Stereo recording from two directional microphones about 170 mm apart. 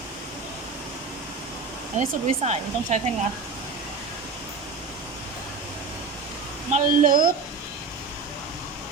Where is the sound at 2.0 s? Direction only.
45° right (ahead or behind).